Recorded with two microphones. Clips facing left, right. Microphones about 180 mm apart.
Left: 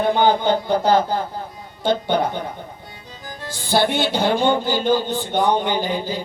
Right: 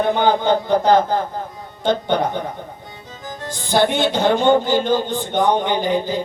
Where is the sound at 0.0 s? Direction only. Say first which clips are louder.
Even; 20° right (ahead or behind).